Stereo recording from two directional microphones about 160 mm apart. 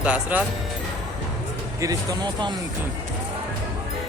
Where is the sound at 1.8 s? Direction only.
25° right (ahead or behind).